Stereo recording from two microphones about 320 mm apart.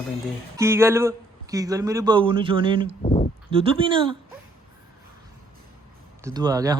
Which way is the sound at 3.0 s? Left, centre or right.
Left.